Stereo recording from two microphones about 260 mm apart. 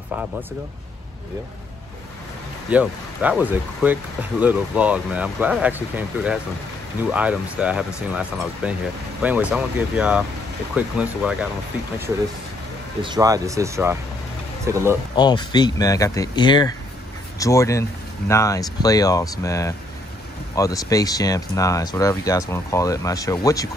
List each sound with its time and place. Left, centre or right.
2.7 s speech: centre
13.0 s speech: centre
15.1 s speech: centre